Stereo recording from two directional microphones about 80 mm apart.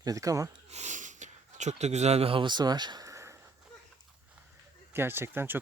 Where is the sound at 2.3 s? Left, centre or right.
Right.